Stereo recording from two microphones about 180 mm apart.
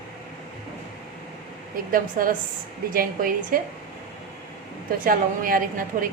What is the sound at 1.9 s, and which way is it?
A woman's voice, 50° right (ahead or behind).